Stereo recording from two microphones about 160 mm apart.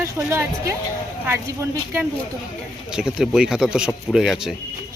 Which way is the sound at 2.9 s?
5° right (ahead or behind).